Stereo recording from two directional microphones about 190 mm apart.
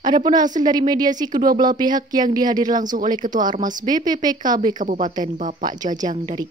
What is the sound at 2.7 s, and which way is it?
A woman's voice, 45° right (ahead or behind).